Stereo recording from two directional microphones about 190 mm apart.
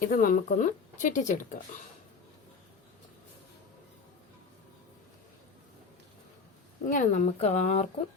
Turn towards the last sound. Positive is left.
turn(degrees=35)  # may be behind; listen again after turning